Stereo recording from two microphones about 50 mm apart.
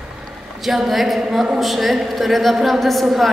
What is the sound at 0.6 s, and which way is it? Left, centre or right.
A man's voice, centre.